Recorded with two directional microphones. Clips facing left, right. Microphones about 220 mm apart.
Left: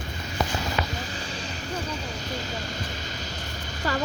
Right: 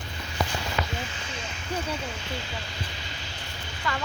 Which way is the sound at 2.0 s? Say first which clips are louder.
Left 2 dB; 40° left (ahead or behind).